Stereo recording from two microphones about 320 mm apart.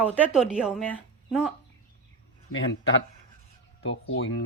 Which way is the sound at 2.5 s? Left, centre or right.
Left.